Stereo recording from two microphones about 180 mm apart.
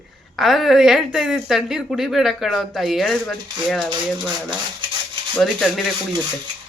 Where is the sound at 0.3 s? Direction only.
Centre (ahead or behind).